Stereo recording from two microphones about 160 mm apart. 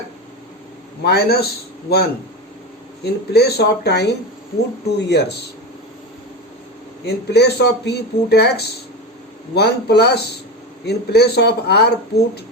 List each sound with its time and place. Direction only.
1.0 s a man's voice: 85° left
3.0 s speech: 90° left
7.0 s speech: 90° left